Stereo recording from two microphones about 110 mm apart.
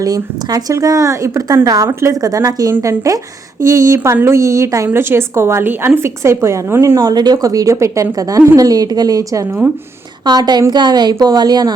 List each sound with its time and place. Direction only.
0.0 s a woman's voice: 35° right (ahead or behind)
10.2 s a woman's voice: 40° right (ahead or behind)